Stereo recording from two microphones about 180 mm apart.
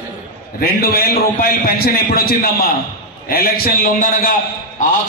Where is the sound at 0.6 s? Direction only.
60° left (ahead or behind).